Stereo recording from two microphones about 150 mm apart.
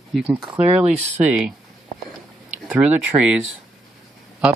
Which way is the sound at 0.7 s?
45° right (ahead or behind).